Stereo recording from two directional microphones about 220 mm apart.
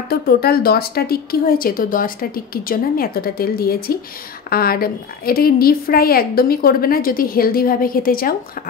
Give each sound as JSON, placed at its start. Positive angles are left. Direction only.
{"t": 0.1, "sound": "a woman's voice", "side_deg": 45}